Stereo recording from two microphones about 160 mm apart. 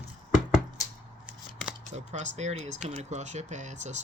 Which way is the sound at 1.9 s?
45° right (ahead or behind).